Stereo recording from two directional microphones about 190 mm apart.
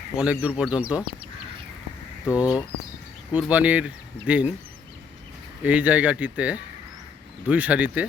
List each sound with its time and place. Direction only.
0.2 s speech: 5° right (ahead or behind)
2.4 s speech: 20° left (ahead or behind)
3.3 s speech: 5° right (ahead or behind)
5.6 s speech: 10° right (ahead or behind)